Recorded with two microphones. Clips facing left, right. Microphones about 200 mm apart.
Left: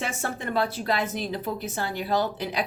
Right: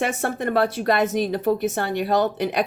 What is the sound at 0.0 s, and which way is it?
A woman's voice, 60° right (ahead or behind).